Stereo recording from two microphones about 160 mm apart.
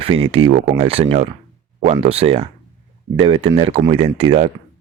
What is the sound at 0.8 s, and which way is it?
Speech, 35° right (ahead or behind).